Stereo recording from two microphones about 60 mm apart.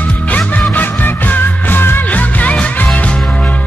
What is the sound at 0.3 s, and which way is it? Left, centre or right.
Music, left.